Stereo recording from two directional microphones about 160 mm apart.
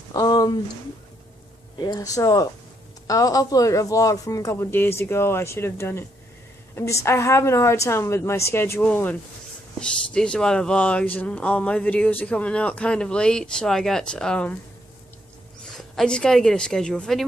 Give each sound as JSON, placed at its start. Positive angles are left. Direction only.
{"t": 0.1, "sound": "a sound", "side_deg": 25}
{"t": 1.8, "sound": "speech", "side_deg": 25}
{"t": 15.8, "sound": "a woman's voice", "side_deg": 5}